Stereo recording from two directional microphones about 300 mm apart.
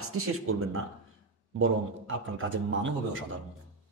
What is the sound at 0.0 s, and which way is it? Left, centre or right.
A man's voice, right.